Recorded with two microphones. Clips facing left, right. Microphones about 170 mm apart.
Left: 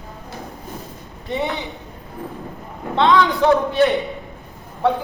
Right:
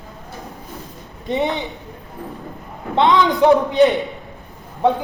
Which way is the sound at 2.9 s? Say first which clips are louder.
Right 1 dB; 20° right (ahead or behind).